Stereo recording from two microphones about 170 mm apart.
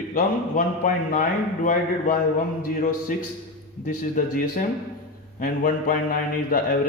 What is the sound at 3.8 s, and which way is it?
A man's voice, 50° left (ahead or behind).